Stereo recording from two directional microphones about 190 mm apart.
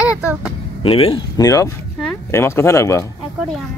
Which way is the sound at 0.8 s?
30° left (ahead or behind).